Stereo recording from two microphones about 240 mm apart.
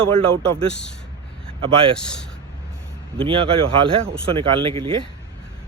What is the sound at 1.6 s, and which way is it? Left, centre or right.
Speech, right.